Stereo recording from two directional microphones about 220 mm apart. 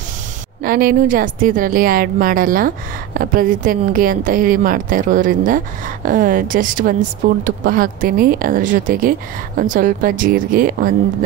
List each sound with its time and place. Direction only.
0.7 s speech: 40° right (ahead or behind)